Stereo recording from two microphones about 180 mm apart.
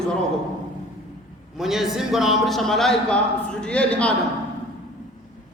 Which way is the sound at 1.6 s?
Centre (ahead or behind).